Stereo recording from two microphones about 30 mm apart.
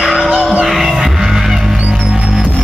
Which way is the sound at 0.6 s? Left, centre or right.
Centre.